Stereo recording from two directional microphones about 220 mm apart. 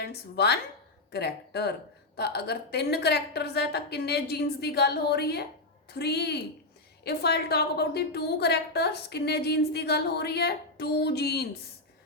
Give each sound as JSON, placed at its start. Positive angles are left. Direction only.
{"t": 0.0, "sound": "a woman's voice", "side_deg": 50}